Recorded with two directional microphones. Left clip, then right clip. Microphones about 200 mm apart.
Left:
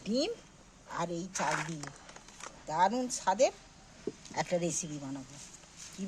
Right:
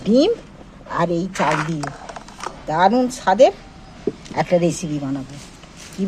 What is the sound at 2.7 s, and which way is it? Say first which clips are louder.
Speech: right 13 dB; 5° right (ahead or behind).